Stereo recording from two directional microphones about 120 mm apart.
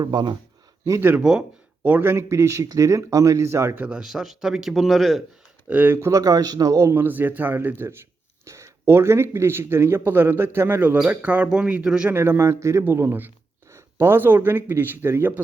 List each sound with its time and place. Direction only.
0.0 s speech: 35° right (ahead or behind)
0.9 s speech: 25° right (ahead or behind)
1.1 s speech: 5° right (ahead or behind)
5.6 s speech: 15° right (ahead or behind)
12.1 s speech: 20° right (ahead or behind)